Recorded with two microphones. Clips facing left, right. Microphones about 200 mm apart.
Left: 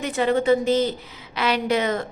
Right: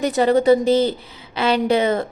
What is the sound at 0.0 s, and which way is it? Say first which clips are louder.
A woman's voice: right 5 dB; 35° right (ahead or behind).